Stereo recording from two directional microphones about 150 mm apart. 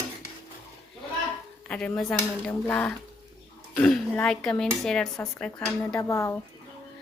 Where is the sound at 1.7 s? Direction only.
10° left (ahead or behind).